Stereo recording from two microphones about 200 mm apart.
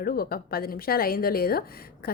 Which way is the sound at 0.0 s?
50° left (ahead or behind).